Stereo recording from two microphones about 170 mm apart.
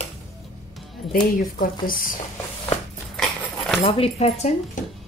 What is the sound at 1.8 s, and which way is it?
Speech, 55° left (ahead or behind).